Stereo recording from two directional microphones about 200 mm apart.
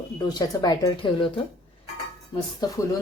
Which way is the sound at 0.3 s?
20° left (ahead or behind).